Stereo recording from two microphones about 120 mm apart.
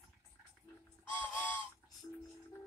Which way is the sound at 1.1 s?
15° left (ahead or behind).